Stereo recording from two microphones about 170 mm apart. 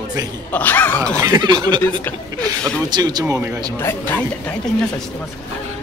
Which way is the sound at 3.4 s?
10° right (ahead or behind).